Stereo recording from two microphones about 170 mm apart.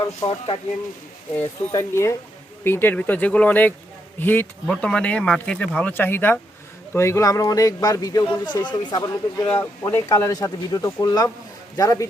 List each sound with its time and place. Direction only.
0.3 s speech: 35° left (ahead or behind)
1.4 s speech: 15° left (ahead or behind)